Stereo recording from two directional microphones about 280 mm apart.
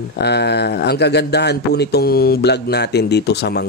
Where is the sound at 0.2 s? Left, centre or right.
Left.